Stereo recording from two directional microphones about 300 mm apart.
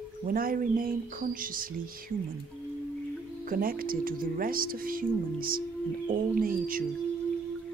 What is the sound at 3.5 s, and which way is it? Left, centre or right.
Speech, right.